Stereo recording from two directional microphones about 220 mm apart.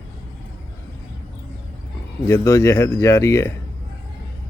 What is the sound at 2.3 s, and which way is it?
Speech, 15° left (ahead or behind).